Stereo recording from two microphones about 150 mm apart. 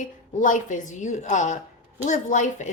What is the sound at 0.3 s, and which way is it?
Speech, 60° left (ahead or behind).